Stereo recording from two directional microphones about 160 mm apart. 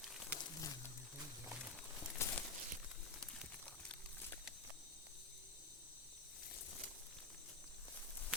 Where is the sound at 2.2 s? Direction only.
15° left (ahead or behind).